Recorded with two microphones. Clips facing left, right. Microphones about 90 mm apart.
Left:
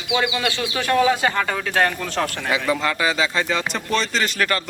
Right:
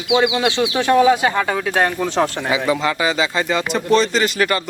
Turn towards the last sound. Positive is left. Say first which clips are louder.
# right 4 dB
turn(degrees=-5)  # may be behind; listen again after turning